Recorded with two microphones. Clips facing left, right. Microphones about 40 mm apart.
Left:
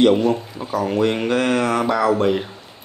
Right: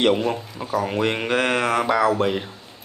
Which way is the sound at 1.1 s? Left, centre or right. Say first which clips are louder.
Left 2 dB; right.